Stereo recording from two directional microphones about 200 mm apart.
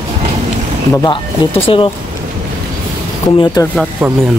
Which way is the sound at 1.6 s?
25° left (ahead or behind).